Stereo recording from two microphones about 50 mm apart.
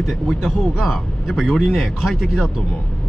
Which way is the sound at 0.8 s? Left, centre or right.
Centre.